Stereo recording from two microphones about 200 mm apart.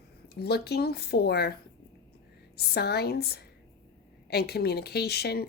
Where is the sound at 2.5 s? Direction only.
55° left (ahead or behind).